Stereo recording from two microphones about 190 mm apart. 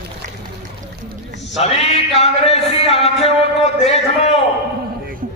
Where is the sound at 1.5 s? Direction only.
35° left (ahead or behind).